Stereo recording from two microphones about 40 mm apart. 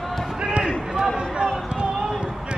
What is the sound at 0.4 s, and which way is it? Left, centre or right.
Basketball bounce, right.